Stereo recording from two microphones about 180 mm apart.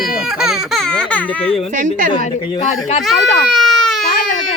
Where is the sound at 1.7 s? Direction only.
45° right (ahead or behind).